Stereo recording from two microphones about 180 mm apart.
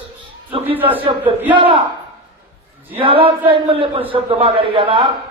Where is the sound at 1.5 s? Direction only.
30° right (ahead or behind).